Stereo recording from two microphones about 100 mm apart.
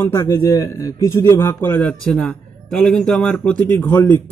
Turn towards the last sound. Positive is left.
turn(degrees=20)  # may be behind; listen again after turning